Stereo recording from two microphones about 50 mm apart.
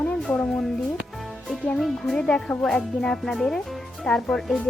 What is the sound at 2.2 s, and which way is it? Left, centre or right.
Speech, centre.